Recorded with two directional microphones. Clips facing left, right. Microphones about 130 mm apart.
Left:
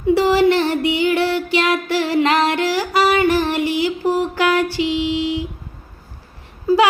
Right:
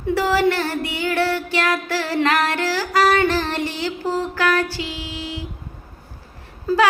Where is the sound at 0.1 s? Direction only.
15° left (ahead or behind).